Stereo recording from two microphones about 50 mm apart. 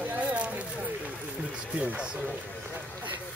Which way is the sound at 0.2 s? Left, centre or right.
Right.